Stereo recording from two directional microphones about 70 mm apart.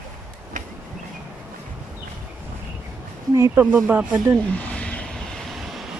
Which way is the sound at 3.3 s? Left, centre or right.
Right.